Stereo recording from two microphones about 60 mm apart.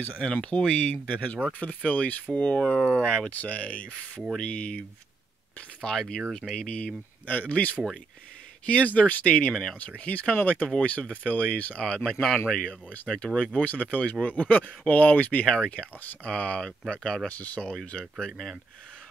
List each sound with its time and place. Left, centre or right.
0.2 s speech: left
9.5 s speech: centre
9.8 s speech: left
12.1 s speech: centre
13.6 s speech: left
15.4 s speech: centre
17.3 s speech: left
17.6 s speech: centre